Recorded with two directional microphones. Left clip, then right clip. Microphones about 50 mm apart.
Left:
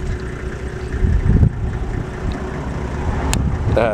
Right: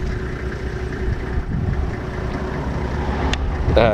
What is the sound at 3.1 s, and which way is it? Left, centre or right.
Vehicle, right.